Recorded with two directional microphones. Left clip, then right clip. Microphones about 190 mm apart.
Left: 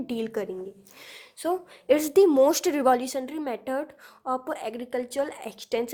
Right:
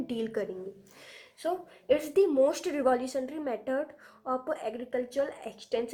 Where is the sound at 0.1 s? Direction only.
40° left (ahead or behind).